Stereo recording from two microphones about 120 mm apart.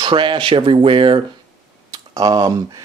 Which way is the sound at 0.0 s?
45° right (ahead or behind).